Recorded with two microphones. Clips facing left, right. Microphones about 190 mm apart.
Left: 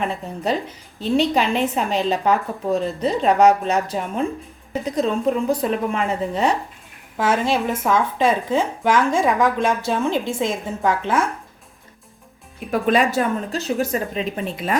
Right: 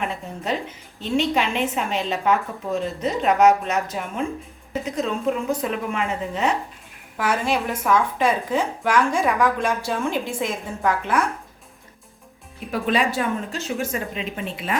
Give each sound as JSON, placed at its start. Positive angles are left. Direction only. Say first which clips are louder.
{"t": 0.0, "sound": "a woman's voice", "louder": "left 4 dB", "side_deg": 35}
{"t": 12.7, "sound": "a woman's voice", "louder": "left 4 dB", "side_deg": 45}